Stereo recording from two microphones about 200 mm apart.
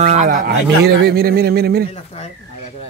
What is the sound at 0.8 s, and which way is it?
Speech, 55° right (ahead or behind).